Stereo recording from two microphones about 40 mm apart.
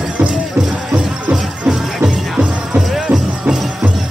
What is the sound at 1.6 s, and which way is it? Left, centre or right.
Music, centre.